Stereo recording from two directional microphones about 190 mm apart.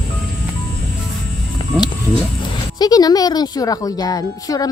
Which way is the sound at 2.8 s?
20° left (ahead or behind).